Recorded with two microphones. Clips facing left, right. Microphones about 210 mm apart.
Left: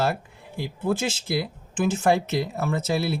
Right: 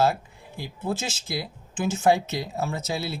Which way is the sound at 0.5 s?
55° left (ahead or behind).